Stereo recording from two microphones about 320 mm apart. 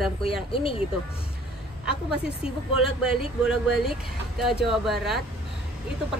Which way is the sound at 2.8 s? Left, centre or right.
Centre.